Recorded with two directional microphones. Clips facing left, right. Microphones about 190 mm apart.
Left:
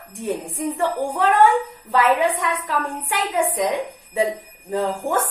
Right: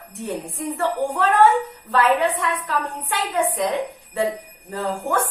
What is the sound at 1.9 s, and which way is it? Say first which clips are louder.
A woman's voice: left 1 dB; 10° left (ahead or behind).